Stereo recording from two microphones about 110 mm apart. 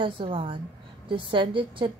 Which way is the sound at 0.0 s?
55° right (ahead or behind).